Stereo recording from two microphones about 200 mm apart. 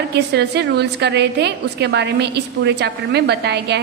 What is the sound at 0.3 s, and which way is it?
A woman's voice, 55° right (ahead or behind).